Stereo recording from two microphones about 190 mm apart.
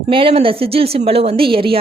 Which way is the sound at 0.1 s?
30° right (ahead or behind).